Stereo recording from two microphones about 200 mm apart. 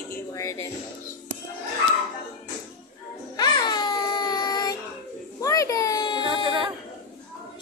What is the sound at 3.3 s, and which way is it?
Baby cry, 20° left (ahead or behind).